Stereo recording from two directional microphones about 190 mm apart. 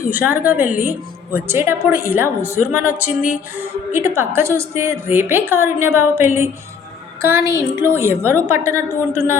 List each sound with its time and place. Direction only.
0.1 s a woman's voice: 10° right (ahead or behind)